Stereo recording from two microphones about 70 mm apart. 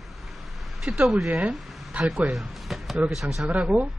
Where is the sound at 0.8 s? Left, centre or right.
Centre.